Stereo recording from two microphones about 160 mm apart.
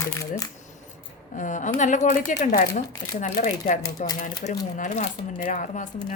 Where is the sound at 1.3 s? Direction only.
50° left (ahead or behind).